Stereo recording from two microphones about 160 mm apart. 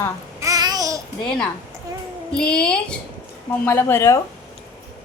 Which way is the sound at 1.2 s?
5° left (ahead or behind).